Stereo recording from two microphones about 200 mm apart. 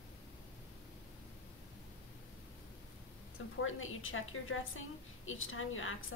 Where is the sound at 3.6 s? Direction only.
85° left.